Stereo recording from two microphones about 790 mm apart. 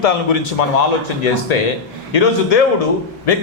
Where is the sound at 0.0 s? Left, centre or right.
Left.